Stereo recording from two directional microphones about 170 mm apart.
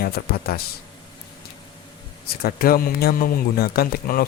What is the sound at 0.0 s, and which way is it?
Speech, 65° left (ahead or behind).